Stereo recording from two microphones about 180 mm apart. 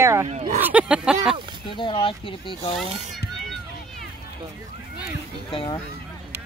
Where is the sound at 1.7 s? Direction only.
25° left (ahead or behind).